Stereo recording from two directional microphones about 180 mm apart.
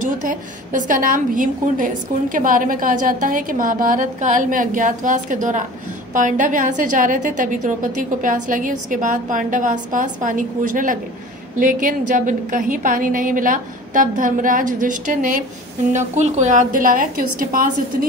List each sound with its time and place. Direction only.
0.0 s a woman's voice: 45° right (ahead or behind)